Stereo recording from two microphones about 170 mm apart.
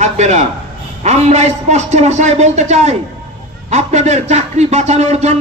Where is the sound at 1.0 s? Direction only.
40° right (ahead or behind).